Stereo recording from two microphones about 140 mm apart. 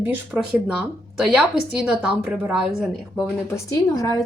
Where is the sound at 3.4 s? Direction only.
20° left (ahead or behind).